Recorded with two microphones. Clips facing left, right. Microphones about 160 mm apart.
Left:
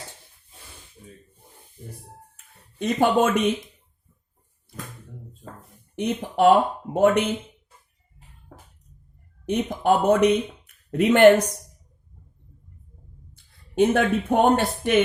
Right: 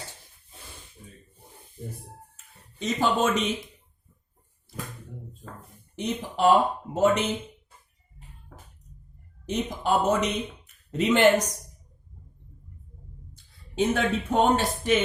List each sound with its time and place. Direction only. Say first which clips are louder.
2.3 s a sound: even; 55° left (ahead or behind)
6.0 s speech: left 5 dB; 55° left (ahead or behind)
9.5 s speech: left 5 dB; 60° left (ahead or behind)
13.3 s speech: left 7 dB; 55° left (ahead or behind)